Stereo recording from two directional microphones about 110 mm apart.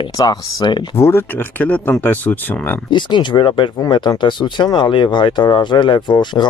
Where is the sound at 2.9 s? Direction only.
45° left (ahead or behind).